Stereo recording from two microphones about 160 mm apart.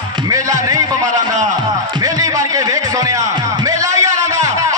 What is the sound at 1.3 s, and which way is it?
Speech, 50° right (ahead or behind).